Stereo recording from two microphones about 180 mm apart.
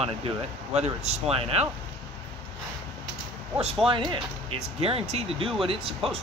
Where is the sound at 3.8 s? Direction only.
30° right (ahead or behind).